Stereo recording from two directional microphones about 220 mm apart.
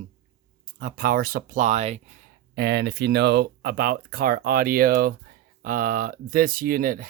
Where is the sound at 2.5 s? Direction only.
50° right (ahead or behind).